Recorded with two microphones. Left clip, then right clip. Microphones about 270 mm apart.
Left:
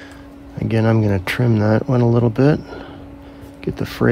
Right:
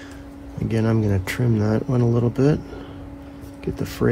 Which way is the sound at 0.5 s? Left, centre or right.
Left.